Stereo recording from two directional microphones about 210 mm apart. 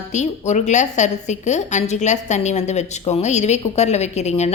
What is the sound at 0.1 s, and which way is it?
A woman's voice, 35° left (ahead or behind).